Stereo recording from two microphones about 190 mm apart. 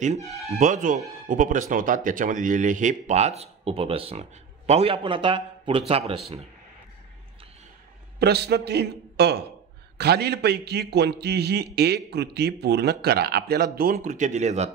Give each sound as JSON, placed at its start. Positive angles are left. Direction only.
{"t": 0.5, "sound": "speech", "side_deg": -40}
{"t": 8.2, "sound": "a man's voice", "side_deg": -60}